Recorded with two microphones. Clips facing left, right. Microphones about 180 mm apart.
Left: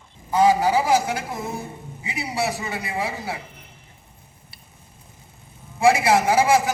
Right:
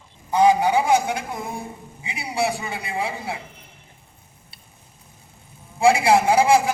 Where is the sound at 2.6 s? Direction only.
25° right (ahead or behind).